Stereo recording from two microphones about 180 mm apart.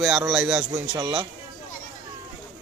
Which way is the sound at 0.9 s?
20° right (ahead or behind).